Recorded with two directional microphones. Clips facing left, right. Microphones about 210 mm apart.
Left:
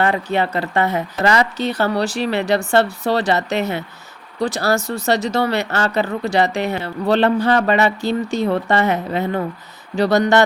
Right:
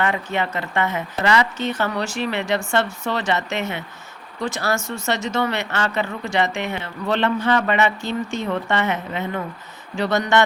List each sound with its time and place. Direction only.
0.0 s speech: 35° left (ahead or behind)